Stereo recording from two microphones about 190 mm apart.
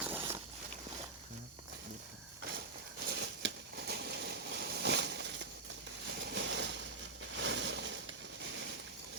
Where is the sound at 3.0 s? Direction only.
60° right (ahead or behind).